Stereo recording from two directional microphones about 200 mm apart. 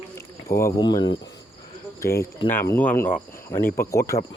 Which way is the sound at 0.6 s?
15° left (ahead or behind).